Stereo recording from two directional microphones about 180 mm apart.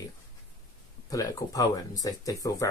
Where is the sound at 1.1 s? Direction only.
20° left (ahead or behind).